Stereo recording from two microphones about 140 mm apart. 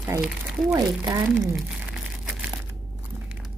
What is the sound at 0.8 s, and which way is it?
Speech, 25° right (ahead or behind).